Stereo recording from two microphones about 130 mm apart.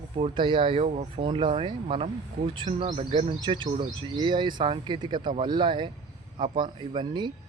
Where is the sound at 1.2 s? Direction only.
40° right (ahead or behind).